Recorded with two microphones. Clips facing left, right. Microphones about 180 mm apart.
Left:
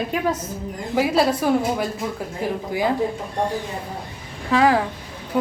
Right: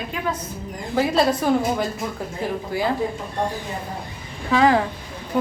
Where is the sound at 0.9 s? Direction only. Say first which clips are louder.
Even; 10° left (ahead or behind).